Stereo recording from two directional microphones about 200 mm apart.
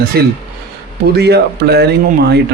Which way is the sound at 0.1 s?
55° right (ahead or behind).